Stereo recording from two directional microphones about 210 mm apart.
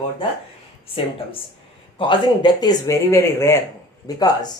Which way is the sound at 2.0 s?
20° left (ahead or behind).